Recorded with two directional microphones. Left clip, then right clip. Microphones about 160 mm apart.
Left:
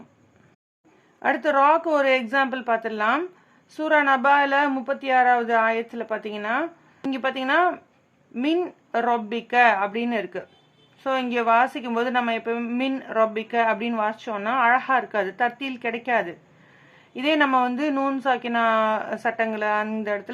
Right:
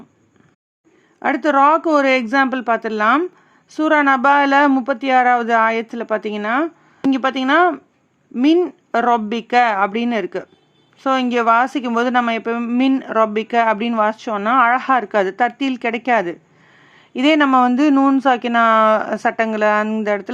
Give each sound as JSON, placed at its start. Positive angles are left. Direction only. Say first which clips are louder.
{"t": 1.2, "sound": "speech", "louder": "right 5 dB", "side_deg": -30}